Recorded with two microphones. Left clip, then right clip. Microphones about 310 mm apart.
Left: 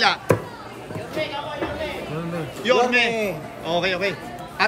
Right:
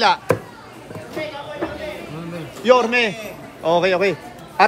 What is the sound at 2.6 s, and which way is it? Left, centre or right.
A man's voice, centre.